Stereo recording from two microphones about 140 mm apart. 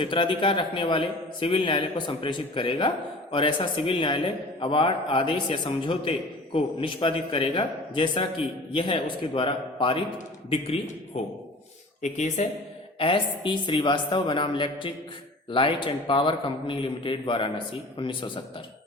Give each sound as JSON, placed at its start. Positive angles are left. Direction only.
{"t": 0.0, "sound": "a man's voice", "side_deg": 35}
{"t": 12.0, "sound": "speech", "side_deg": 55}
{"t": 13.0, "sound": "a man's voice", "side_deg": 40}